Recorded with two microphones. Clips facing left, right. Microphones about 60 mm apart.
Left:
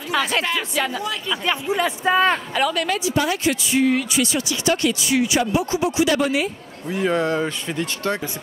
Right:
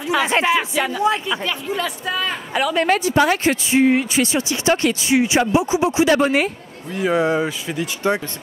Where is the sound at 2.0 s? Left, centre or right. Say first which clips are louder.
Left 6 dB; left.